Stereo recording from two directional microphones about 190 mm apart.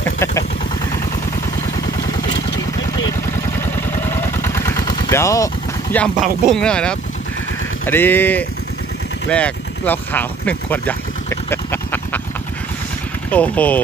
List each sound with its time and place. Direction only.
0.2 s vehicle: 15° left (ahead or behind)
4.0 s vehicle: 10° left (ahead or behind)
6.1 s speech: centre (ahead or behind)
13.3 s speech: 5° left (ahead or behind)